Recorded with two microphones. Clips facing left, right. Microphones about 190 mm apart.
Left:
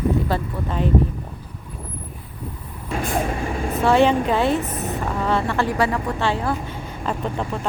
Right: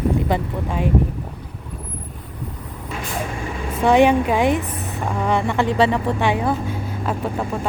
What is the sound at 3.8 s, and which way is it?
Speech, 15° right (ahead or behind).